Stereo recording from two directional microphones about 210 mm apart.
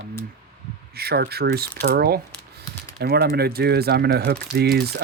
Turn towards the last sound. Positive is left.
turn(degrees=-50)  # may be behind; listen again after turning